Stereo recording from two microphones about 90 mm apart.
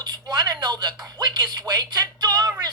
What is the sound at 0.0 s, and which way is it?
Speech, 50° right (ahead or behind).